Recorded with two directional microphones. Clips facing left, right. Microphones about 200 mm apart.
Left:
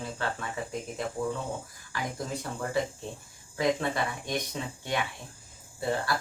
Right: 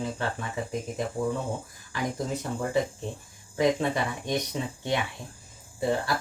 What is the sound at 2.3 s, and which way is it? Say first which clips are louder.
Speech: right 4 dB; 20° right (ahead or behind).